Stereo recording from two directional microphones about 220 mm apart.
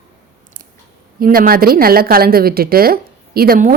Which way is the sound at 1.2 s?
40° right (ahead or behind).